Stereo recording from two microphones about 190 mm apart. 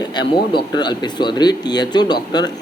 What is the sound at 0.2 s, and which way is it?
Speech, 25° left (ahead or behind).